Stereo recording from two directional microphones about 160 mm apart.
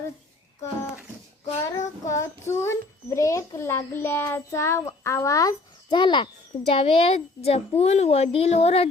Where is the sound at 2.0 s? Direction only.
20° left (ahead or behind).